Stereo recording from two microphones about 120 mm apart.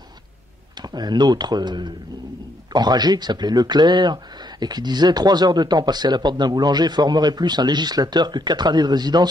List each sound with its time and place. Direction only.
0.7 s speech: 35° right (ahead or behind)